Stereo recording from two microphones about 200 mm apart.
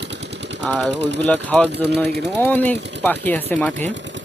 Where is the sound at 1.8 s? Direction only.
55° right (ahead or behind).